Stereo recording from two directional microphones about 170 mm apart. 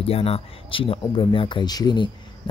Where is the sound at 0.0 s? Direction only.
35° left (ahead or behind).